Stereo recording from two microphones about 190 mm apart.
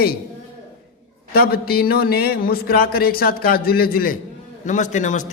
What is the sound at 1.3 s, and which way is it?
A man's voice, 55° left (ahead or behind).